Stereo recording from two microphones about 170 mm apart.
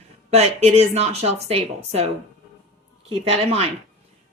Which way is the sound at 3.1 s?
35° right (ahead or behind).